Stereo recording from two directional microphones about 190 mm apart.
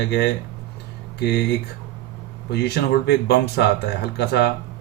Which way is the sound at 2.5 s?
60° left (ahead or behind).